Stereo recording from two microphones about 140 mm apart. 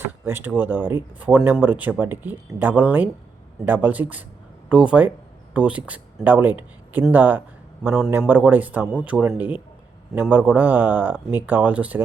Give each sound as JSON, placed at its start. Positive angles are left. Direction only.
{"t": 0.3, "sound": "speech", "side_deg": -15}